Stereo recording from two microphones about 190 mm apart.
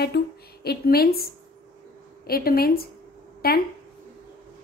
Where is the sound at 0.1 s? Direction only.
55° left (ahead or behind).